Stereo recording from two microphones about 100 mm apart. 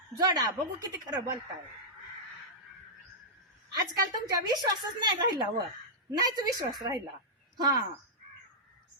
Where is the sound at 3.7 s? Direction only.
40° right (ahead or behind).